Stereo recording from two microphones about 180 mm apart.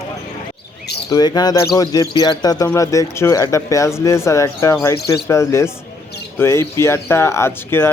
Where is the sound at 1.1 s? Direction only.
20° left (ahead or behind).